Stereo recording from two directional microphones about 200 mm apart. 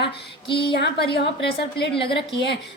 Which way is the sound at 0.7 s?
55° left (ahead or behind).